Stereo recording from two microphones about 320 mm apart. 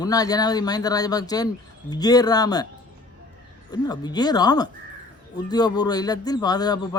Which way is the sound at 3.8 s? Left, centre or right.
Centre.